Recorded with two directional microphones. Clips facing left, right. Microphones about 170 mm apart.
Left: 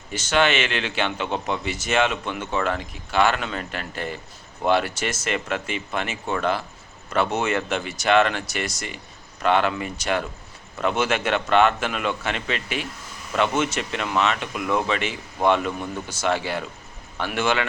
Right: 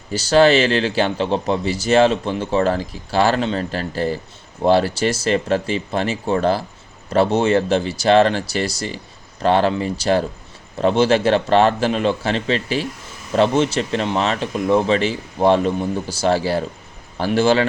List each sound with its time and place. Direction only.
0.1 s speech: 35° right (ahead or behind)